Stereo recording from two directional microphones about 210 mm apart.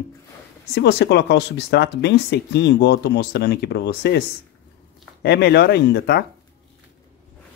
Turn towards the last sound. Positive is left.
turn(degrees=50)  # may be behind; listen again after turning